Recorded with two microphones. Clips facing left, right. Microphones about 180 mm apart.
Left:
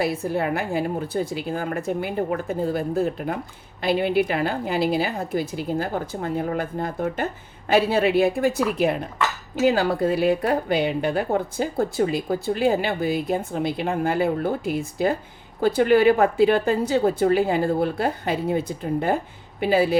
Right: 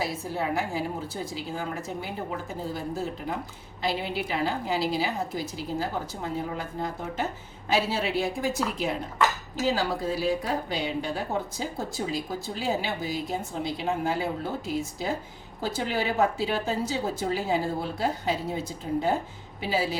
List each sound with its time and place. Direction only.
0.0 s a woman's voice: 60° left (ahead or behind)